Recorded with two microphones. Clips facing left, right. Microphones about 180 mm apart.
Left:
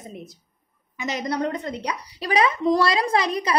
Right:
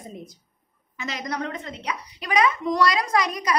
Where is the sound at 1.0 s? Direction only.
20° left (ahead or behind).